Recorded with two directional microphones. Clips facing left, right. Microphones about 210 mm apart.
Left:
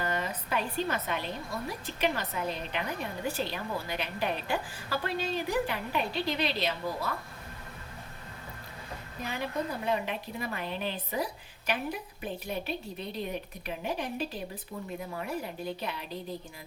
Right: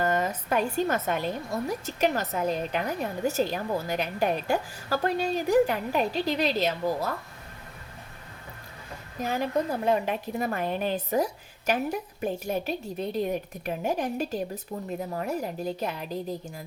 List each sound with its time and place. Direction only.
0.0 s a woman's voice: 45° right (ahead or behind)
9.2 s a woman's voice: 45° right (ahead or behind)